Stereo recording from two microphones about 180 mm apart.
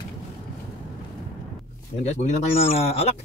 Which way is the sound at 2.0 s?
40° left (ahead or behind).